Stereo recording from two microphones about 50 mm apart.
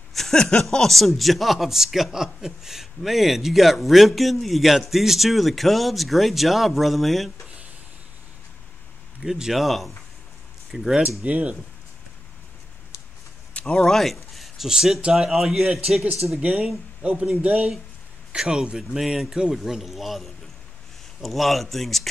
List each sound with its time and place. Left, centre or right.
0.1 s a sound: centre
0.6 s a man's voice: centre
9.2 s a man's voice: centre
11.2 s speech: right
13.5 s a sound: left
13.7 s speech: centre
14.7 s speech: centre
15.6 s speech: centre
18.3 s a man's voice: centre